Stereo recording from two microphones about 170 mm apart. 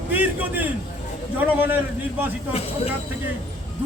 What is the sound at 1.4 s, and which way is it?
Speech, 10° right (ahead or behind).